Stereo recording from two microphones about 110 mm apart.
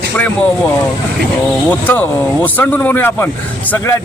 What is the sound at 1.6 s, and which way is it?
A man's voice, 15° left (ahead or behind).